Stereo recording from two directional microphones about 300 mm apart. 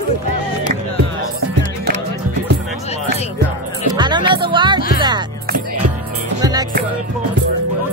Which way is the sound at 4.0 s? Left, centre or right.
Centre.